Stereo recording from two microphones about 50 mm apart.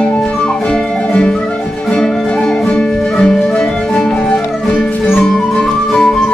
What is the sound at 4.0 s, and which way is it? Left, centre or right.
Music, centre.